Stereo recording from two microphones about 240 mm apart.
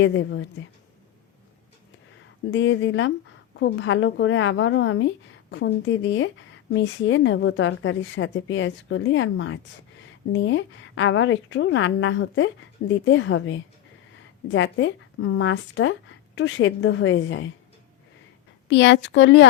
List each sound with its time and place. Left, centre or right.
0.0 s speech: left
2.5 s speech: left
18.7 s speech: left